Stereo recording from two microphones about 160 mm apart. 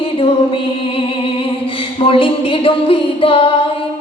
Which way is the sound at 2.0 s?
35° left (ahead or behind).